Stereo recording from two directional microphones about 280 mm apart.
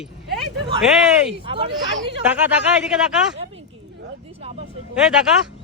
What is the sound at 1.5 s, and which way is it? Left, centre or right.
Speech, centre.